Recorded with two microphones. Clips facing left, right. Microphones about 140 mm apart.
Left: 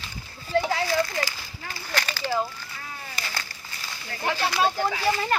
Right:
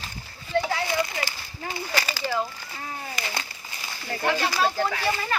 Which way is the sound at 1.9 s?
10° right (ahead or behind).